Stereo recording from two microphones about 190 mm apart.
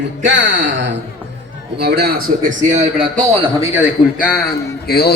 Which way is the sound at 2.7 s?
35° right (ahead or behind).